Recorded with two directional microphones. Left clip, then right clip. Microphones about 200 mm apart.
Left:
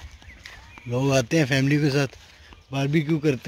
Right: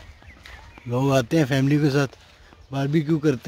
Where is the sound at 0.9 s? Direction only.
20° right (ahead or behind).